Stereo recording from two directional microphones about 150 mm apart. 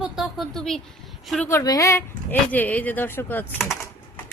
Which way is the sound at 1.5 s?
20° left (ahead or behind).